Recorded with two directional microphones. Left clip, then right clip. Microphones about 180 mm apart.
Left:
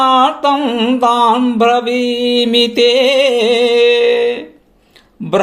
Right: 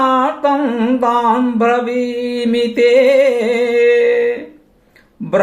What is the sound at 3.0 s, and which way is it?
Music, 55° left (ahead or behind).